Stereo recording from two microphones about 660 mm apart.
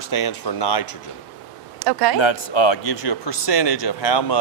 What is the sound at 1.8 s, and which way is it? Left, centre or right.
Speech, right.